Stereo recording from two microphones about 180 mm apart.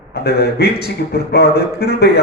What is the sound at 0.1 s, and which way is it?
A man's voice, 60° left (ahead or behind).